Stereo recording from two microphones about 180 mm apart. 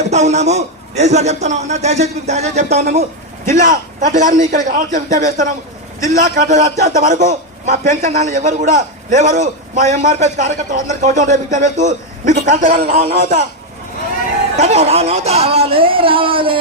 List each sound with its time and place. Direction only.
0.0 s a man's voice: 40° right (ahead or behind)
14.5 s a man's voice: 40° right (ahead or behind)